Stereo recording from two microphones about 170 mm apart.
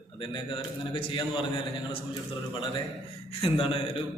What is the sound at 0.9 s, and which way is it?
Speech, 30° left (ahead or behind).